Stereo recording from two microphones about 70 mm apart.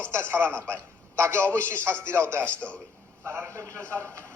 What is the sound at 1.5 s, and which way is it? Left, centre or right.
A man's voice, left.